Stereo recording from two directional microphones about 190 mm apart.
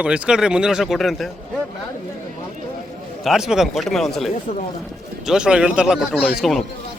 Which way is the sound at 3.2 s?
5° right (ahead or behind).